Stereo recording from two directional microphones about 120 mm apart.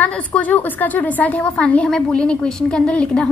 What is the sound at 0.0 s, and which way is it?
A woman's voice, 10° left (ahead or behind).